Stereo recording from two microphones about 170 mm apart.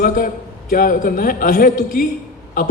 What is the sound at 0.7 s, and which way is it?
A man's voice, 55° left (ahead or behind).